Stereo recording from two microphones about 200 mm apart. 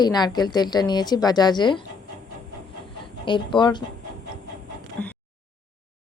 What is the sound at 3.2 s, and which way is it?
Speech, 25° left (ahead or behind).